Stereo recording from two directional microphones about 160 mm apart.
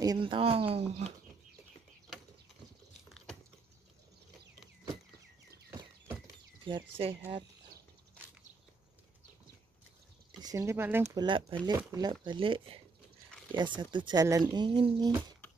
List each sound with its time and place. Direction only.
0.0 s speech: 30° right (ahead or behind)
2.1 s a sound: centre (ahead or behind)
5.7 s horse: 15° right (ahead or behind)
6.6 s speech: 35° right (ahead or behind)
10.4 s speech: 20° right (ahead or behind)
11.2 s speech: 30° right (ahead or behind)